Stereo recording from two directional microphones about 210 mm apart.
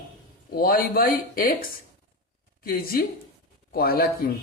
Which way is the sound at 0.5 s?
45° left (ahead or behind).